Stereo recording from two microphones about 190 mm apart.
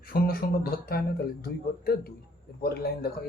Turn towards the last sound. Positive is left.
turn(degrees=55)  # may be behind; listen again after turning